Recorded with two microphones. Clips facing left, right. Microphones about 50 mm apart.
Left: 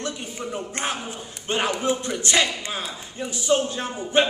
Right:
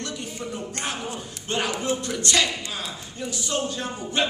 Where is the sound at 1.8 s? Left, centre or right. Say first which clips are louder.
Left 2 dB; centre.